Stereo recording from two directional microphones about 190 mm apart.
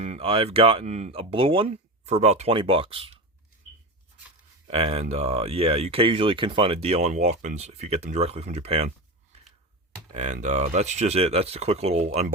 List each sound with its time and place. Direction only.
0.0 s speech: 35° right (ahead or behind)
4.7 s speech: 30° right (ahead or behind)
10.2 s speech: 40° right (ahead or behind)